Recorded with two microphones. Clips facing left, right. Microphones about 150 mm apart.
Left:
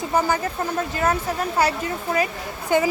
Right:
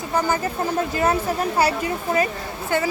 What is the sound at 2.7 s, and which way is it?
Speech, 15° left (ahead or behind).